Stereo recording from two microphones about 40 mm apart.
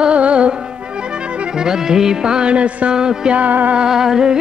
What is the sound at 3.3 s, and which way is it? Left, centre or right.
Music, right.